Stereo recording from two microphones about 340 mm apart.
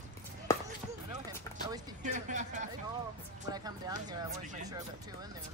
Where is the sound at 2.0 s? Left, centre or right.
Right.